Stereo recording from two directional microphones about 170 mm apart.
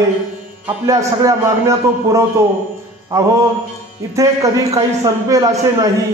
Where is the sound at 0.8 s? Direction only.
20° right (ahead or behind).